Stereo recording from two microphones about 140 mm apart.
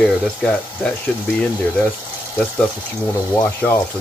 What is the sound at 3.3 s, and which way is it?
Speech, 15° left (ahead or behind).